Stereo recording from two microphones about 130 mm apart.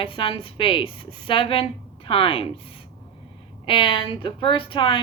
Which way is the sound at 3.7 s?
40° left (ahead or behind).